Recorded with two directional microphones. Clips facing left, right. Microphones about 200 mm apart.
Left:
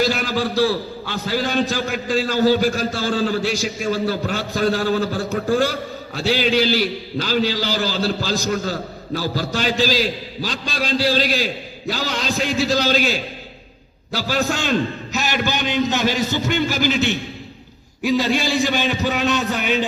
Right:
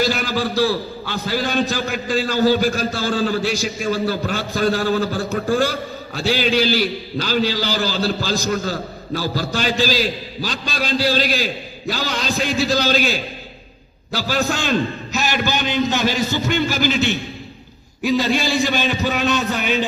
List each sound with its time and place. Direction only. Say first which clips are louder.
0.0 s a man's voice: even; 25° left (ahead or behind)